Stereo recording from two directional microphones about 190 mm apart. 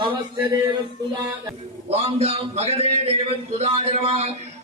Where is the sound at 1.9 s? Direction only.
30° right (ahead or behind).